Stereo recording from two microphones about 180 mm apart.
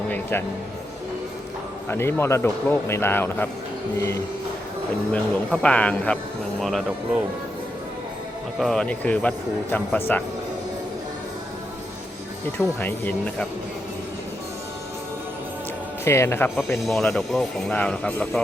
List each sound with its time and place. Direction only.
0.1 s music: 10° left (ahead or behind)
1.9 s a man's voice: 15° left (ahead or behind)
8.5 s a man's voice: centre (ahead or behind)
12.8 s a man's voice: 10° left (ahead or behind)
16.0 s a man's voice: 15° left (ahead or behind)
16.8 s speech: centre (ahead or behind)